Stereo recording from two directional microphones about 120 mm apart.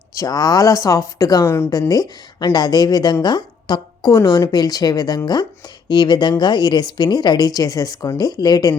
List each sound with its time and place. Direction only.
0.1 s a woman's voice: 30° left (ahead or behind)